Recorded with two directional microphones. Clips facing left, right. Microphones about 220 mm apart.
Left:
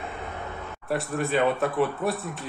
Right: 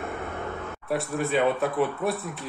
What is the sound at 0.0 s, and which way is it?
Vehicle, 50° right (ahead or behind).